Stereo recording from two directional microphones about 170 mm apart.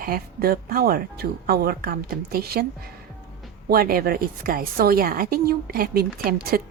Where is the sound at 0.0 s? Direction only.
60° right (ahead or behind).